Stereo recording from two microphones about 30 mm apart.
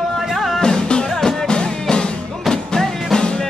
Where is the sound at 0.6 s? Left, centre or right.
Left.